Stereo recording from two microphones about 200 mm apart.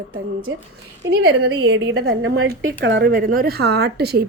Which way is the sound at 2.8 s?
60° right (ahead or behind).